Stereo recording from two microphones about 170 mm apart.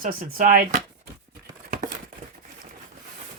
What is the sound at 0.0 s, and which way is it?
Speech, 50° right (ahead or behind).